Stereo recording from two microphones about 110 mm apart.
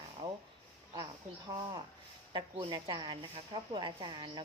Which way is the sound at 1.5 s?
50° right (ahead or behind).